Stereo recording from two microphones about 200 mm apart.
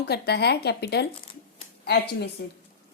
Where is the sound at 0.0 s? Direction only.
55° left (ahead or behind).